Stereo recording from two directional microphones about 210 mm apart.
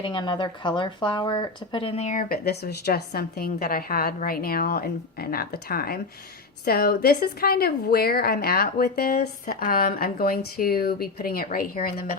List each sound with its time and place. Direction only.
0.0 s speech: 25° left (ahead or behind); by 12.1 s 45° left (ahead or behind)